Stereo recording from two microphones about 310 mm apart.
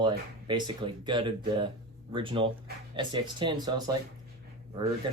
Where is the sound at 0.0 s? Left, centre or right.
Centre.